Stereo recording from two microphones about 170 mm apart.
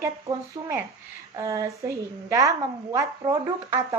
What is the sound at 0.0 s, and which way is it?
A woman's voice, 15° right (ahead or behind).